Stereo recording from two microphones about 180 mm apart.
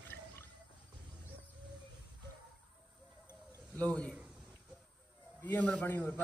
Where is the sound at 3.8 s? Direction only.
10° left (ahead or behind).